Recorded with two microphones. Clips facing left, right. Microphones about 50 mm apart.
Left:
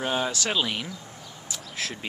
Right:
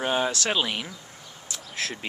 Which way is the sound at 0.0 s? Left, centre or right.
Centre.